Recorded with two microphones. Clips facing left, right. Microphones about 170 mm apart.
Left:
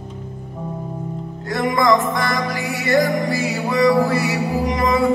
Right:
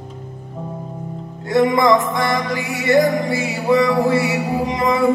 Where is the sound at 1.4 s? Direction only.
20° right (ahead or behind).